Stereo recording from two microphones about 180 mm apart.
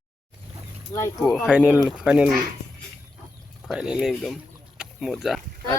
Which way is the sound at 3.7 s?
5° right (ahead or behind).